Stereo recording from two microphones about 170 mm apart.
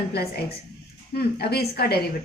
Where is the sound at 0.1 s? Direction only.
70° left (ahead or behind).